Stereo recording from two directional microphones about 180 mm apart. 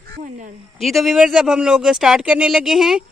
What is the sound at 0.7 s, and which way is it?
Speech, centre (ahead or behind).